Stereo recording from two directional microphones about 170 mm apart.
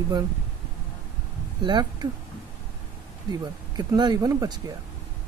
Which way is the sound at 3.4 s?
25° right (ahead or behind).